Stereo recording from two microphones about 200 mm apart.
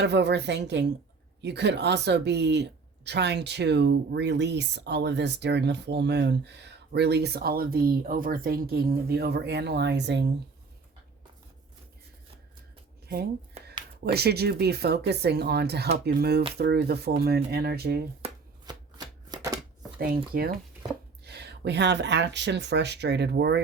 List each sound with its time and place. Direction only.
0.0 s speech: 60° right (ahead or behind)
14.0 s speech: 55° right (ahead or behind)
18.2 s shuffling cards: 20° right (ahead or behind)
20.0 s speech: 50° right (ahead or behind)